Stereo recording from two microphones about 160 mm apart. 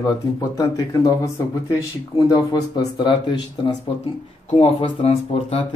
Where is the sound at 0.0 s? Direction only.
20° left (ahead or behind); by 5.8 s 40° left (ahead or behind).